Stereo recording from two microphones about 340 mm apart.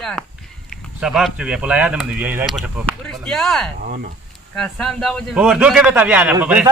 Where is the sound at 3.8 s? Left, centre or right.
Right.